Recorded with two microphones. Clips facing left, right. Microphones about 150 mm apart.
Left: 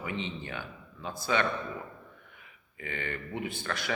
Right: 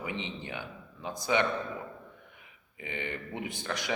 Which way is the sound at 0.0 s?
15° right (ahead or behind).